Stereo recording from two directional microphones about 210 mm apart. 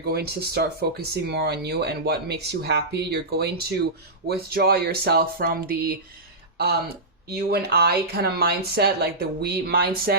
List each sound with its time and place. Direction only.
0.0 s speech: 50° right (ahead or behind)